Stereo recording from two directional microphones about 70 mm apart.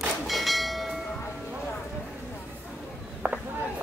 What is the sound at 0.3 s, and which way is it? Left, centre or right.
Train, centre.